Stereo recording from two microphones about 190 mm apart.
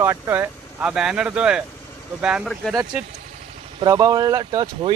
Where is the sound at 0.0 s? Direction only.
10° right (ahead or behind).